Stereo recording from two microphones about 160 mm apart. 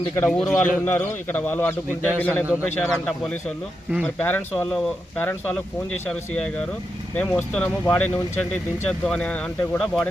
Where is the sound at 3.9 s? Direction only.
5° right (ahead or behind).